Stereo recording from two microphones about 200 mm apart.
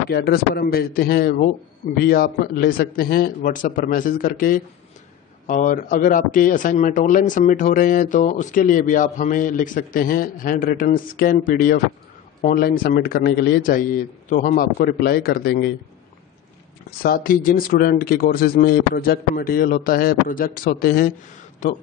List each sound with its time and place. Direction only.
0.1 s speech: 50° left (ahead or behind)
17.0 s speech: 45° left (ahead or behind)